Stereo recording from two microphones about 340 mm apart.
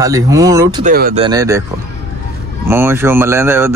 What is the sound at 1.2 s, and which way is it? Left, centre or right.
Speech, centre.